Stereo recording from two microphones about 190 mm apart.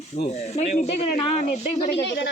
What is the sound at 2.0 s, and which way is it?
Speech, 65° left (ahead or behind).